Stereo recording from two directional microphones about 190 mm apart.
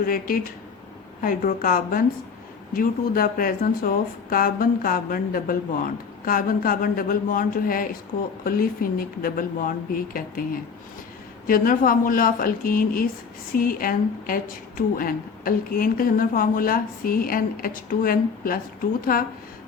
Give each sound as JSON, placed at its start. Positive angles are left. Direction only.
{"t": 0.0, "sound": "a woman's voice", "side_deg": 50}
{"t": 11.4, "sound": "a woman's voice", "side_deg": 50}